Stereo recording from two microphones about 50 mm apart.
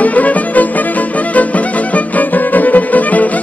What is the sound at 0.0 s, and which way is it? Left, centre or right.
Music, left.